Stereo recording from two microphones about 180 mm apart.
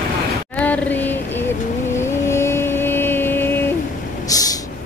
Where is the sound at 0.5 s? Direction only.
10° left (ahead or behind).